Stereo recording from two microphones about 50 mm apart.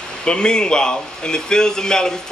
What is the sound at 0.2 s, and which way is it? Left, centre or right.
Speech, centre.